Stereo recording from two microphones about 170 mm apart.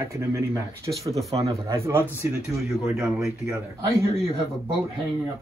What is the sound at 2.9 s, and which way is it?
Speech, centre (ahead or behind).